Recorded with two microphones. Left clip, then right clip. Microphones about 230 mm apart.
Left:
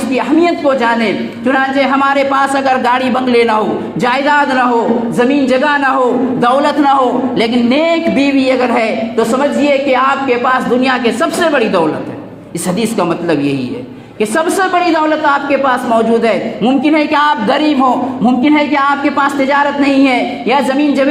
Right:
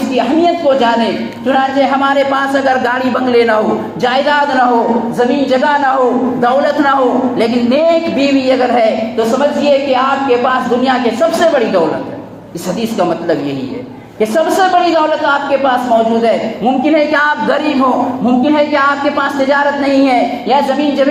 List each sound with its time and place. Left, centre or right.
0.2 s a woman's voice: left
10.4 s a woman's voice: left
14.9 s a woman's voice: left
16.9 s a woman's voice: left